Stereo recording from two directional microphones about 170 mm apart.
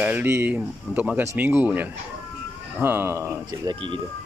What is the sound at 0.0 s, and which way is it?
Speech, 10° right (ahead or behind).